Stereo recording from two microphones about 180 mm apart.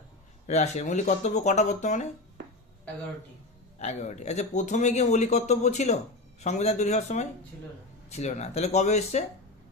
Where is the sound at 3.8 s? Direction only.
40° left (ahead or behind).